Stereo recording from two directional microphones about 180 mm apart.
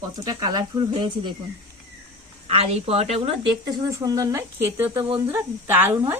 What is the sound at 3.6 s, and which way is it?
Speech, 20° right (ahead or behind).